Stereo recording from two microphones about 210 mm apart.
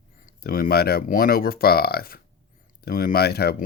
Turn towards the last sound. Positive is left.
turn(degrees=50)  # may be behind; listen again after turning